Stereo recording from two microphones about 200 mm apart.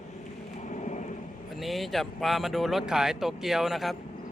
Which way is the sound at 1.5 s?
Centre (ahead or behind).